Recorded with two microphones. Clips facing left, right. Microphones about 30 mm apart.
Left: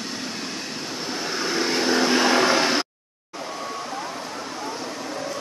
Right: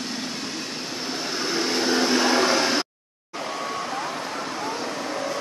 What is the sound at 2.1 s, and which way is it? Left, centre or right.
Vehicle, left.